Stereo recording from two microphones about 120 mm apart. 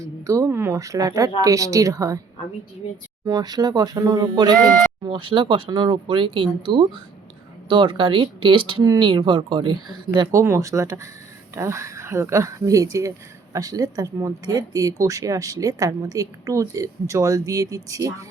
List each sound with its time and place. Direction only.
0.0 s speech: 25° right (ahead or behind)
3.2 s speech: 35° right (ahead or behind)
5.0 s speech: 45° right (ahead or behind)
10.3 s speech: 20° right (ahead or behind)